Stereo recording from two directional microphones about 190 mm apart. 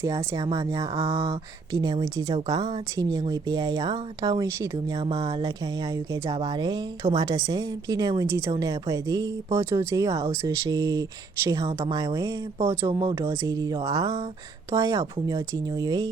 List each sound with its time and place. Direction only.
0.0 s a woman's voice: 15° right (ahead or behind)
1.0 s a woman's voice: 30° right (ahead or behind)